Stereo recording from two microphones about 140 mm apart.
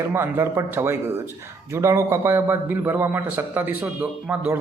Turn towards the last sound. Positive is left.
turn(degrees=-5)  # may be behind; listen again after turning